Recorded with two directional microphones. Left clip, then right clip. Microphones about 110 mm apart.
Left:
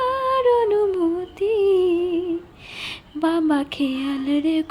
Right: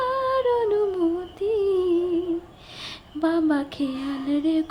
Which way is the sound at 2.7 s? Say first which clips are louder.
Left 3 dB; 15° left (ahead or behind).